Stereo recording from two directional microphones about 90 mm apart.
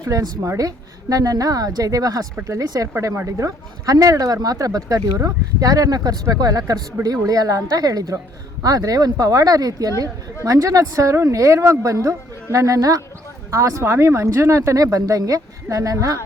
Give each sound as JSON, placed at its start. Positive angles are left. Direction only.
{"t": 0.0, "sound": "a woman's voice", "side_deg": -40}